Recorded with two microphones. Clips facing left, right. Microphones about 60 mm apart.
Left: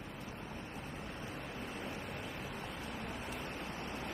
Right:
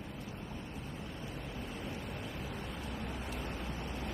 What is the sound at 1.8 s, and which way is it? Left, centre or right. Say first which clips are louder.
Vehicle: right 1 dB; left.